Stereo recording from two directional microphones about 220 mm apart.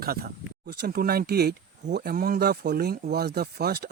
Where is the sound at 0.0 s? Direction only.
45° right (ahead or behind).